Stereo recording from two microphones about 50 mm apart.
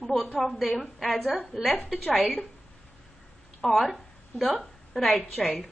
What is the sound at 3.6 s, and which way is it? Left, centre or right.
A woman's voice, centre.